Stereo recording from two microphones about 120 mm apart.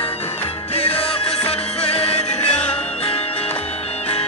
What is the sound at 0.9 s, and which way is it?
Music, 55° left (ahead or behind).